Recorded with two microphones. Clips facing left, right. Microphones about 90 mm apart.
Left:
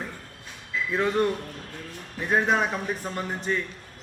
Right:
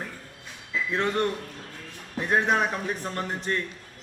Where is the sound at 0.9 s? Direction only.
5° left (ahead or behind).